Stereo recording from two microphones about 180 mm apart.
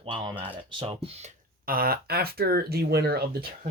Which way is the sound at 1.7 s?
55° right (ahead or behind).